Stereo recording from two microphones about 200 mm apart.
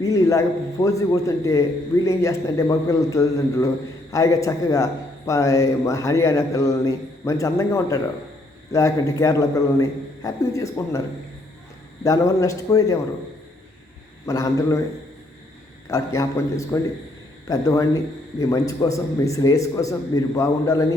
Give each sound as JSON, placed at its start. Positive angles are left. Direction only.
{"t": 0.0, "sound": "a man's voice", "side_deg": 15}
{"t": 12.0, "sound": "a man's voice", "side_deg": 15}
{"t": 14.3, "sound": "a man's voice", "side_deg": 15}
{"t": 15.9, "sound": "a man's voice", "side_deg": 15}